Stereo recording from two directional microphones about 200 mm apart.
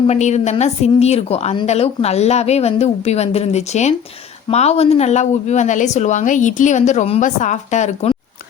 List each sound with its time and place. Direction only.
0.1 s a woman's voice: 35° left (ahead or behind)